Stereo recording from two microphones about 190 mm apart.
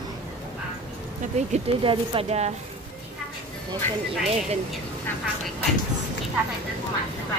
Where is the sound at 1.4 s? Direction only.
35° right (ahead or behind).